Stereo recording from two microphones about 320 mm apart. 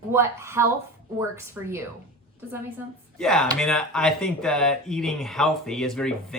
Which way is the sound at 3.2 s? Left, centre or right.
Centre.